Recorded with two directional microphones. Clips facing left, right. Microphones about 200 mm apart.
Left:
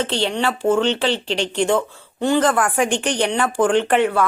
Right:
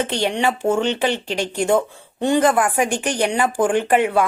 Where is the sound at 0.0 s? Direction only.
15° right (ahead or behind).